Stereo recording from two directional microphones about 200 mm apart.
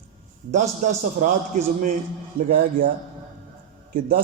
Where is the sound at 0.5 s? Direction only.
40° right (ahead or behind).